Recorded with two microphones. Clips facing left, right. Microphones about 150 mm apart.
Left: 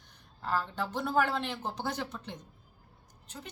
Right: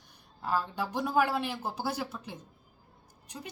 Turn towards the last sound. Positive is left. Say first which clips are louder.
# right 2 dB
turn(degrees=-10)  # may be behind; listen again after turning